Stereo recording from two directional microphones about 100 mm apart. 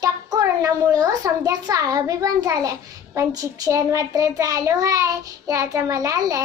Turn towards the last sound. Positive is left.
turn(degrees=-35)  # may be behind; listen again after turning